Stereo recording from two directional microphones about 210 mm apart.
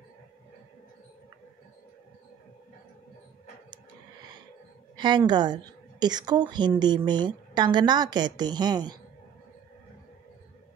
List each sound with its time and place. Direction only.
4.9 s a woman's voice: 20° right (ahead or behind)